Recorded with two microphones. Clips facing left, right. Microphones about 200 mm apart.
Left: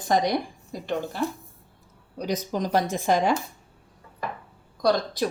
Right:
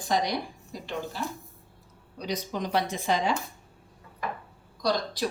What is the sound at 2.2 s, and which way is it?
A woman's voice, 45° left (ahead or behind).